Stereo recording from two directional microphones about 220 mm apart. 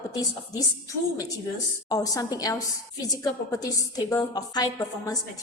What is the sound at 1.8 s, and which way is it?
A woman's voice, 15° left (ahead or behind).